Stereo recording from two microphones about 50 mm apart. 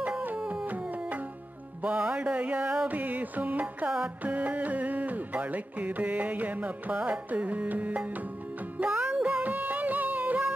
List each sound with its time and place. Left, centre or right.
1.8 s music: right
2.9 s music: right